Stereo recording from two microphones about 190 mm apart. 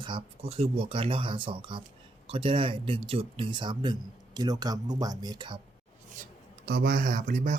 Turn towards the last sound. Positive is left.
turn(degrees=-40)  # may be behind; listen again after turning